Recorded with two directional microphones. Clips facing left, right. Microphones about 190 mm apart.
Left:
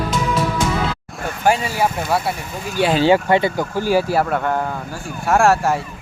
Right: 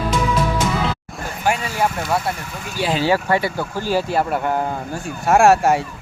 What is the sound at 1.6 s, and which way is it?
Speech, 10° left (ahead or behind).